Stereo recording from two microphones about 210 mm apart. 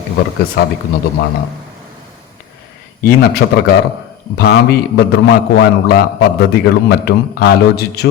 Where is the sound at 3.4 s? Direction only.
70° left (ahead or behind).